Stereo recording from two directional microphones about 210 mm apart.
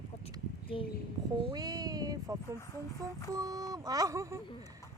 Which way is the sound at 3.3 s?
15° right (ahead or behind).